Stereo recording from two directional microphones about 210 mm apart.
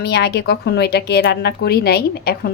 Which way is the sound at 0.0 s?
50° left (ahead or behind).